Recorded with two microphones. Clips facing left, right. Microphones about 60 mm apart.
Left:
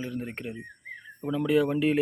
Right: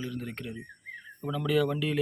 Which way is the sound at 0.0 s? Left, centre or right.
Left.